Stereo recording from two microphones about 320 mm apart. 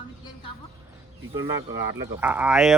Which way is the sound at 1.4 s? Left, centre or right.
Right.